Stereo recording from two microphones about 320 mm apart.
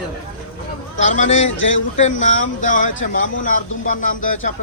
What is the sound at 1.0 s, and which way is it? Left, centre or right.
Speech, left.